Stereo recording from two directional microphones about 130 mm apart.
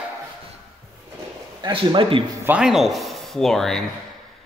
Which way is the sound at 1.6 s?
40° right (ahead or behind).